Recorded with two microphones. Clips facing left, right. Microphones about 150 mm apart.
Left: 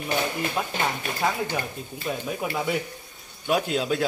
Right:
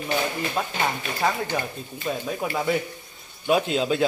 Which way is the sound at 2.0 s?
5° left (ahead or behind).